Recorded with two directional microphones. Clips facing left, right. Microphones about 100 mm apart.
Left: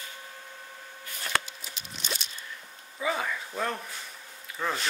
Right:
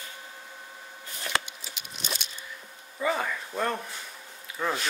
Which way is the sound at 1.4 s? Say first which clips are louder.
Even; 35° left (ahead or behind).